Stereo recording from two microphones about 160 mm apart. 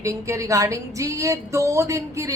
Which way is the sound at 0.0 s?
20° right (ahead or behind).